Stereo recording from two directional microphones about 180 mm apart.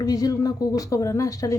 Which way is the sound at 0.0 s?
20° left (ahead or behind).